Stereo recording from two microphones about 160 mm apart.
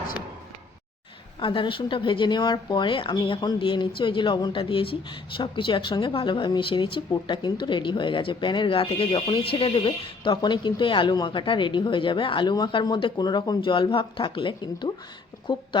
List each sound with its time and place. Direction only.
1.4 s speech: 30° left (ahead or behind)